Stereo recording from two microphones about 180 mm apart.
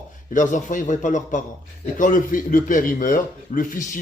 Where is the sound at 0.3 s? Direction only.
45° left (ahead or behind).